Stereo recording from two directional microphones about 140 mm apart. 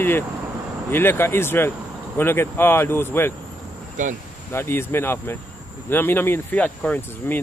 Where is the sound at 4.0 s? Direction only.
65° right (ahead or behind).